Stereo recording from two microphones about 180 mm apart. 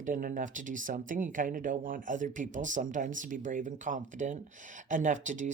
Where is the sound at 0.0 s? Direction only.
45° right (ahead or behind).